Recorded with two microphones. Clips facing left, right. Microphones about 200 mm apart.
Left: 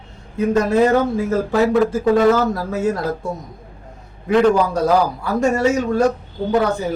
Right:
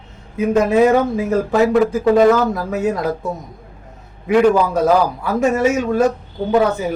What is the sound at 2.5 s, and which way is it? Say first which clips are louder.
Speech: right 1 dB; 15° right (ahead or behind).